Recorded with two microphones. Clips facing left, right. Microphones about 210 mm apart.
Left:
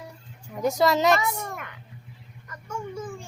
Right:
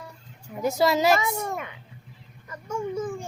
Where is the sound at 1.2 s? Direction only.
25° right (ahead or behind).